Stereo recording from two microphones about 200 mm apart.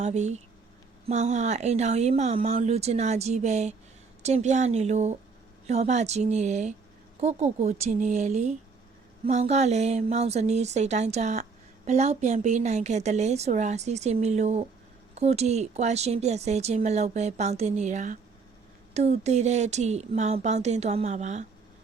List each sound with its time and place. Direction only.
0.0 s speech: 35° right (ahead or behind)